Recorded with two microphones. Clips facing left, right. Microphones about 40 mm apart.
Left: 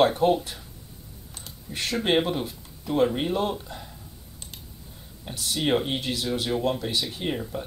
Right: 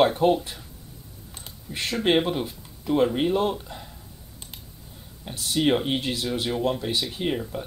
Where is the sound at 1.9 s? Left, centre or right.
Centre.